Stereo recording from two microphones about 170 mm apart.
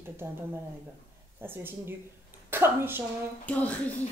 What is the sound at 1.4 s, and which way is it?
Speech, 10° right (ahead or behind).